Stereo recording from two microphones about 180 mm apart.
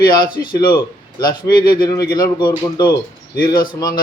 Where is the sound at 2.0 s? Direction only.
55° left (ahead or behind).